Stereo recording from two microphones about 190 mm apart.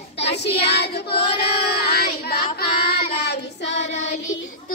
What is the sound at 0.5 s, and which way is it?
Child singing, 60° left (ahead or behind).